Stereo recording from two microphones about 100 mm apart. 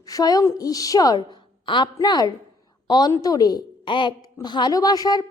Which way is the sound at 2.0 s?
40° left (ahead or behind).